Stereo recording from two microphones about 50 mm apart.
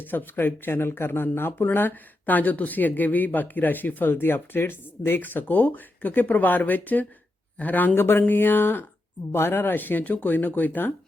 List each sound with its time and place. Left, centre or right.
0.0 s speech: left
7.9 s speech: left